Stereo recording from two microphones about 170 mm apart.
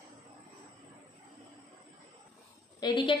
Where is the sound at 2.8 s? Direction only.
25° left (ahead or behind).